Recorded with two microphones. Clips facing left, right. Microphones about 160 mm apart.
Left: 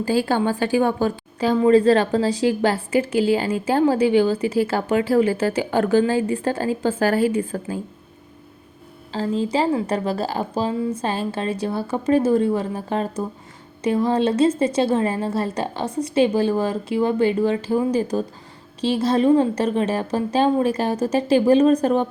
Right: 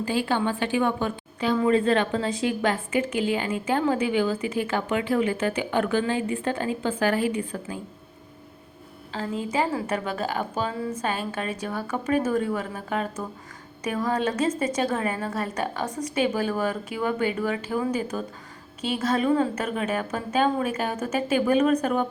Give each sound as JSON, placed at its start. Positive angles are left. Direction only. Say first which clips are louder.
{"t": 0.0, "sound": "a woman's voice", "louder": "left 5 dB", "side_deg": 40}
{"t": 9.1, "sound": "a woman's voice", "louder": "left 5 dB", "side_deg": 30}